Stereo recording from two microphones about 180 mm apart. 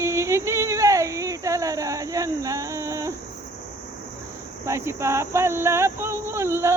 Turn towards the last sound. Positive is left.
turn(degrees=-15)  # may be behind; listen again after turning